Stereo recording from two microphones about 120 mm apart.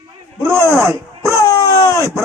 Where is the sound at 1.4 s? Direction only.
25° left (ahead or behind).